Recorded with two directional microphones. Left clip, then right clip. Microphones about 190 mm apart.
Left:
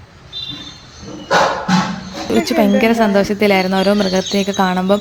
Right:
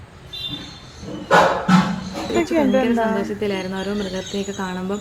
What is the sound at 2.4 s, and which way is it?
Speech, 50° left (ahead or behind).